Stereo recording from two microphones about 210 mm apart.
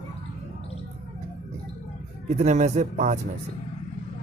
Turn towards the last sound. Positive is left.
turn(degrees=-35)  # may be behind; listen again after turning